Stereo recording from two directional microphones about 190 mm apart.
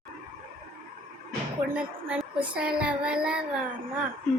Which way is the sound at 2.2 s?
5° right (ahead or behind).